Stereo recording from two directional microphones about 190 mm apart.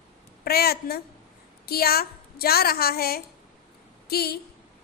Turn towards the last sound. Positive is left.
turn(degrees=55)  # may be behind; listen again after turning